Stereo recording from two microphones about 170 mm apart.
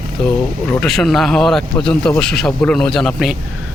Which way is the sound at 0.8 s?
5° left (ahead or behind).